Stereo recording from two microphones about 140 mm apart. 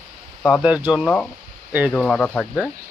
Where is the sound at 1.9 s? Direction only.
5° left (ahead or behind).